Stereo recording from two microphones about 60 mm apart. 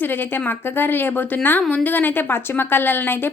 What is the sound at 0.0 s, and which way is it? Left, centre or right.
A woman's voice, left.